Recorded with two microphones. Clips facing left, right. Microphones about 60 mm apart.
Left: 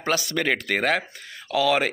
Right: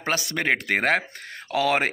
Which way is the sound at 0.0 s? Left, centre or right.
Right.